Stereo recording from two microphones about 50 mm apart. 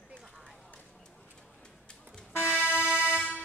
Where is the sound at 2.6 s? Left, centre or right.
Left.